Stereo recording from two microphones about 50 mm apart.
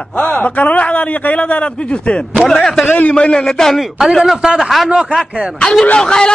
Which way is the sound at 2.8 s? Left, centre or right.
Left.